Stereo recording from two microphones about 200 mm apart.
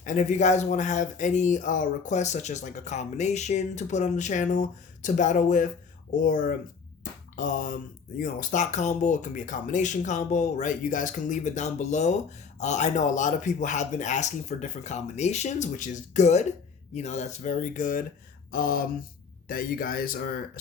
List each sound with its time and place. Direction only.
0.0 s speech: 40° left (ahead or behind)
7.3 s speech: 40° left (ahead or behind)